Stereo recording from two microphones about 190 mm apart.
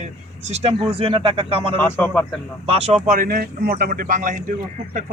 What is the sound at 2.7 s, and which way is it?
Speech, 35° right (ahead or behind).